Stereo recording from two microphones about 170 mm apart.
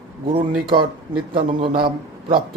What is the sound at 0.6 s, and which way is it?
A man's voice, 30° right (ahead or behind).